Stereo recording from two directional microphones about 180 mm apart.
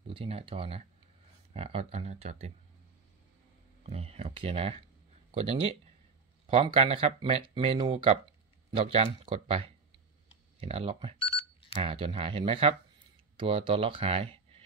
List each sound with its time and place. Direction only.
0.0 s speech: 30° right (ahead or behind)
3.8 s speech: 35° right (ahead or behind)
11.1 s a sound: 30° left (ahead or behind)
11.7 s speech: 30° right (ahead or behind)